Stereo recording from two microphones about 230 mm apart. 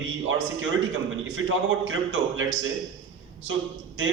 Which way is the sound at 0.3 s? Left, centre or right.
Right.